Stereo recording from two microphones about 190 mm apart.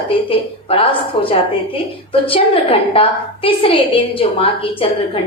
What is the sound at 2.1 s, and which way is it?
A woman's voice, 30° left (ahead or behind).